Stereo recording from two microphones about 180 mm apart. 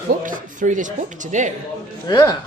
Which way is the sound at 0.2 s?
45° right (ahead or behind).